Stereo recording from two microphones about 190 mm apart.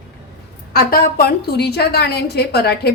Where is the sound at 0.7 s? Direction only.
50° left (ahead or behind).